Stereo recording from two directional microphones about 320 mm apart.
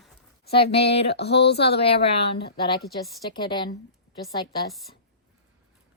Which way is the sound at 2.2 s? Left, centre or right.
Left.